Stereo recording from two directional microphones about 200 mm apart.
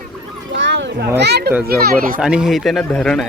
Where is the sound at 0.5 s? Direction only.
60° right (ahead or behind).